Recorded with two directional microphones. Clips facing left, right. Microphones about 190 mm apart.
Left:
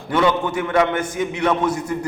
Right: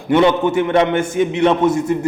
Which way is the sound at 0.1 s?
25° right (ahead or behind).